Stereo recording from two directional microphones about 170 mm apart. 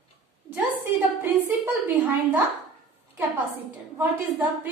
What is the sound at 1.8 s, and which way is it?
Speech, 10° right (ahead or behind).